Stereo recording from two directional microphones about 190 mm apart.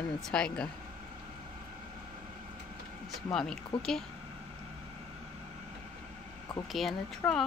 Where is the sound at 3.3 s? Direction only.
5° left (ahead or behind).